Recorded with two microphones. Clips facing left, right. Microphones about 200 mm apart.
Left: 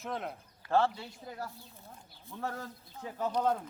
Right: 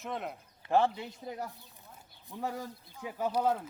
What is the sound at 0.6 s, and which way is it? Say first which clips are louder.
Speech: right 1 dB; 20° right (ahead or behind).